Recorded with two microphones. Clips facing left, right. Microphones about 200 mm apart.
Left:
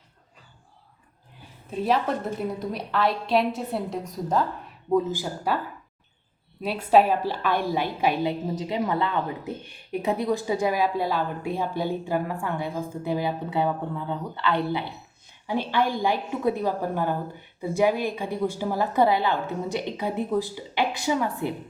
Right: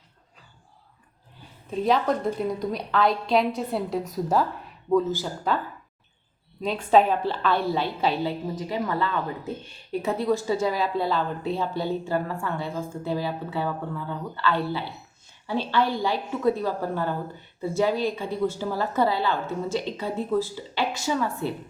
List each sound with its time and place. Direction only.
1.8 s a woman's voice: 5° left (ahead or behind)
4.9 s a woman's voice: 15° left (ahead or behind)
6.6 s a woman's voice: 5° left (ahead or behind)